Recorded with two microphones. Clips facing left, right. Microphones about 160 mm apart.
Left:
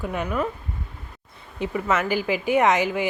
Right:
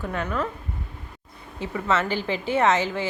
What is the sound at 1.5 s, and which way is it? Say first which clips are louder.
Speech: left 1 dB; 15° left (ahead or behind).